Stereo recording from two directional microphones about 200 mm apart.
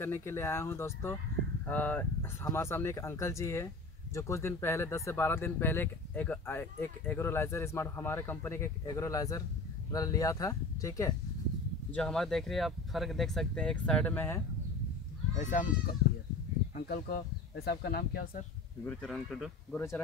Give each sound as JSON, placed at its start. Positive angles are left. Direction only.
{"t": 0.0, "sound": "speech", "side_deg": 10}
{"t": 11.9, "sound": "speech", "side_deg": 5}
{"t": 15.3, "sound": "speech", "side_deg": 40}
{"t": 18.9, "sound": "speech", "side_deg": 5}